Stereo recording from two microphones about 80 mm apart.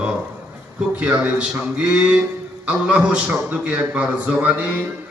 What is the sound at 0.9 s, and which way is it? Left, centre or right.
A man's voice, centre.